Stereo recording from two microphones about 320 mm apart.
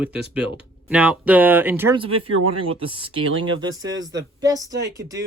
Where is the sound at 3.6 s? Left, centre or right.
Centre.